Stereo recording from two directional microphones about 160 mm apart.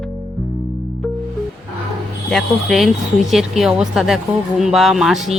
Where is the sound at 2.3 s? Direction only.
Centre (ahead or behind).